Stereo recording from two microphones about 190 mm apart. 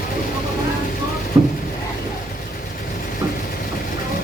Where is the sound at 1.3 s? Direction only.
15° right (ahead or behind).